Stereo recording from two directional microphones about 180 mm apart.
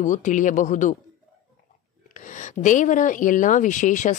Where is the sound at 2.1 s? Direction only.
45° left (ahead or behind).